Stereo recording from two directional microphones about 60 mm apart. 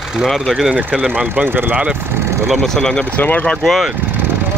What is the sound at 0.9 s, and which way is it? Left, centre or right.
Speech, centre.